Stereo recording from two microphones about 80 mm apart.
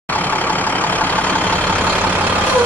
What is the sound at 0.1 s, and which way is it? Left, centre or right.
Vehicle, centre.